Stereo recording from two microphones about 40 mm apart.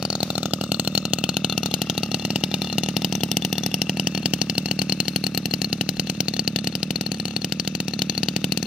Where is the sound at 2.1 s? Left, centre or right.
Right.